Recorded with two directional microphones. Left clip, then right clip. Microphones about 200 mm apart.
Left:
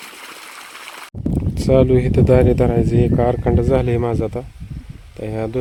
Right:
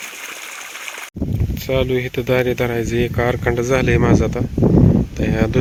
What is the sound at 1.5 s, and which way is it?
Speech, 35° left (ahead or behind).